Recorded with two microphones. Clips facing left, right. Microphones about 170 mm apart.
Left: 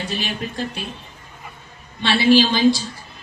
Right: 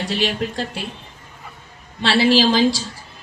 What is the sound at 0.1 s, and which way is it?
Speech, 90° right.